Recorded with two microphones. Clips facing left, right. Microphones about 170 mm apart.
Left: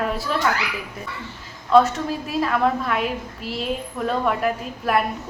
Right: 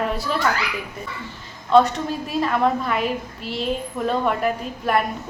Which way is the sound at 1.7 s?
Centre (ahead or behind).